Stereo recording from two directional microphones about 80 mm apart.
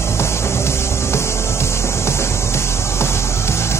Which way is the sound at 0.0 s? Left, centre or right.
Left.